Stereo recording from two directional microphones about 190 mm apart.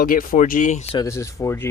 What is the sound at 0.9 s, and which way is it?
Speech, 15° left (ahead or behind).